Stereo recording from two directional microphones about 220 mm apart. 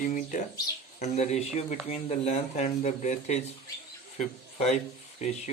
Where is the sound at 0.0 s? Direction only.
35° left (ahead or behind).